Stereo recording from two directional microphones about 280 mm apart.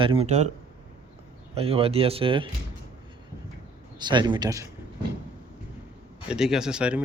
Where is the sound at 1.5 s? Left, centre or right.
Right.